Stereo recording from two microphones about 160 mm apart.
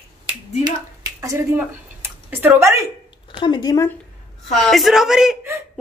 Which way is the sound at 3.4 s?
30° left (ahead or behind).